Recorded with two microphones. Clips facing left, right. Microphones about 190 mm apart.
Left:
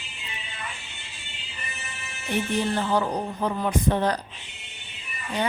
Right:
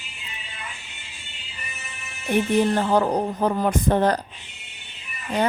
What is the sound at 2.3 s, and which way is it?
Speech, 45° right (ahead or behind).